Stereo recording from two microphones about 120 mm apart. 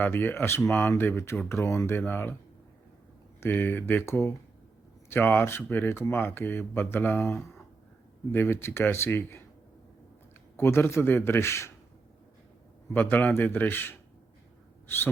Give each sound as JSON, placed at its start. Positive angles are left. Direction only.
{"t": 0.0, "sound": "speech", "side_deg": 15}
{"t": 3.4, "sound": "speech", "side_deg": 15}
{"t": 10.6, "sound": "speech", "side_deg": 20}
{"t": 12.9, "sound": "speech", "side_deg": 15}
{"t": 14.8, "sound": "gasp", "side_deg": 15}